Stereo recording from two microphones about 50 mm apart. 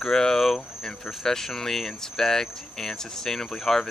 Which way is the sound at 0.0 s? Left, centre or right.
Centre.